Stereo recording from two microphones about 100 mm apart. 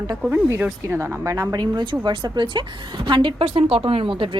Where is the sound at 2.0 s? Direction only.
50° right (ahead or behind).